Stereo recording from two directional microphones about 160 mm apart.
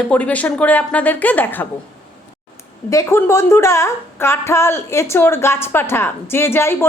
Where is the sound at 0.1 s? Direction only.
10° left (ahead or behind).